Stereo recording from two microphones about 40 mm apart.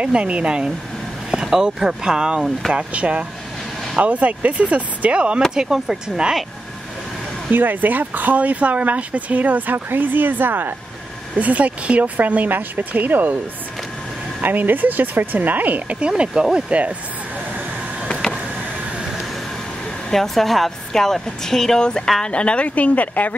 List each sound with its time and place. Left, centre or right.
0.0 s speech: right
1.3 s speech: centre
2.9 s speech: right
5.5 s speech: centre
7.5 s speech: right
11.3 s speech: right
14.4 s speech: right
16.1 s speech: right
16.7 s speech: right
18.0 s a sound: centre
20.1 s speech: centre
22.2 s speech: left